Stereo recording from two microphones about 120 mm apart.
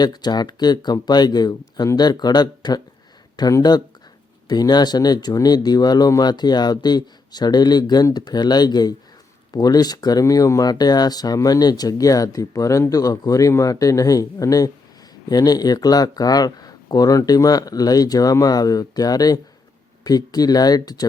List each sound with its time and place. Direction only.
0.0 s speech: 35° left (ahead or behind)